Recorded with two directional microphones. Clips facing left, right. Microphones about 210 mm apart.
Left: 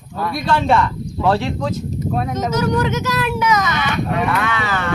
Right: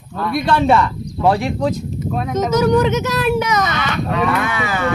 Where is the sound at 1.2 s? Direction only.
15° right (ahead or behind).